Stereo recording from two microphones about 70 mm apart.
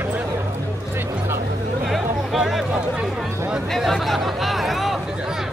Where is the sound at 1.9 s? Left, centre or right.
Centre.